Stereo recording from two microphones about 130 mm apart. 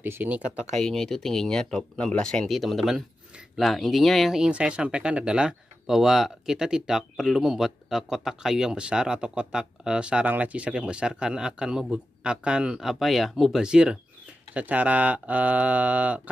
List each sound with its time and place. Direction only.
0.0 s speech: 15° right (ahead or behind)
0.7 s speech: 5° left (ahead or behind); by 16.2 s 10° right (ahead or behind)